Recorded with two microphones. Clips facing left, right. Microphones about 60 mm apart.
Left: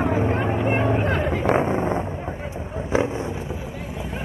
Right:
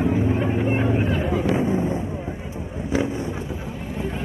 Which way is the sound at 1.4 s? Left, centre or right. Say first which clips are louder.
Left 1 dB; left.